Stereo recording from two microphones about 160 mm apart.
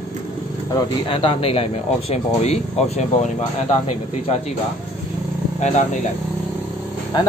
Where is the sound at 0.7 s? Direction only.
35° left (ahead or behind).